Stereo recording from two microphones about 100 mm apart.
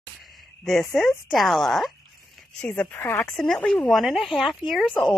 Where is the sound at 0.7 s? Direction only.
5° left (ahead or behind).